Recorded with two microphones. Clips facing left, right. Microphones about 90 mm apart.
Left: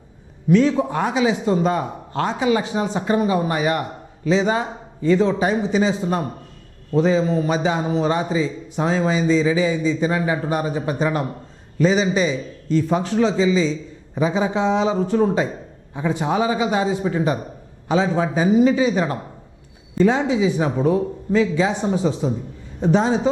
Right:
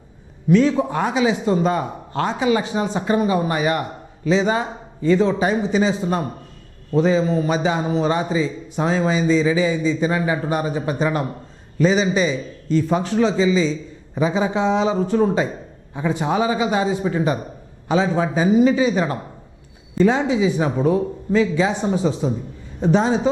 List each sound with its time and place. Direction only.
0.5 s a man's voice: 15° right (ahead or behind)